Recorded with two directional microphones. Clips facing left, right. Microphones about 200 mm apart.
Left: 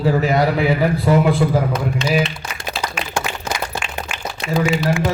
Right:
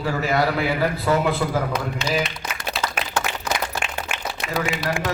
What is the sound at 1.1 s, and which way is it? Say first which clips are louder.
Speech: left 5 dB; 25° left (ahead or behind).